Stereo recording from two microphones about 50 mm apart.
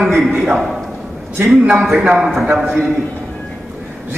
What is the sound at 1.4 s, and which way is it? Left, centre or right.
Speech, centre.